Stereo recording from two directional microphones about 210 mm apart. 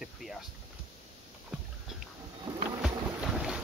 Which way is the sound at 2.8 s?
5° right (ahead or behind).